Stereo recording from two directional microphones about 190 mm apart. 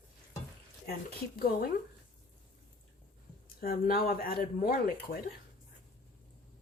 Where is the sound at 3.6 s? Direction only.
50° left (ahead or behind).